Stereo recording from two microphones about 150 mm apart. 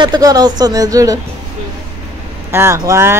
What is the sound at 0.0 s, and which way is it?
Speech, 25° right (ahead or behind).